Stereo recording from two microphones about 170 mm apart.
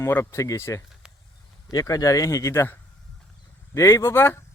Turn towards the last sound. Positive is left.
turn(degrees=15)  # may be behind; listen again after turning